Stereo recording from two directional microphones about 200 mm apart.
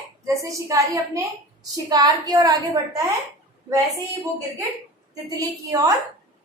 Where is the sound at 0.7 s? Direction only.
15° right (ahead or behind).